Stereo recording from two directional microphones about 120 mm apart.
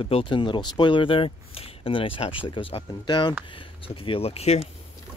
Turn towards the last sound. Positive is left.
turn(degrees=60)  # may be behind; listen again after turning